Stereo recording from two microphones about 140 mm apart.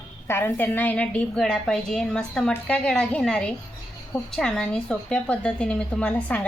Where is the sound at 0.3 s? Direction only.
15° left (ahead or behind).